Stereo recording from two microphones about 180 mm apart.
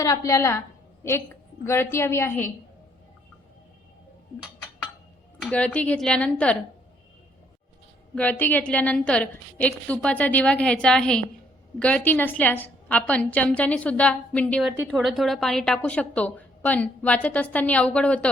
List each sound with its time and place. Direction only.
0.0 s a woman's voice: 20° left (ahead or behind)
5.4 s a woman's voice: 5° left (ahead or behind)
8.1 s a woman's voice: 10° left (ahead or behind)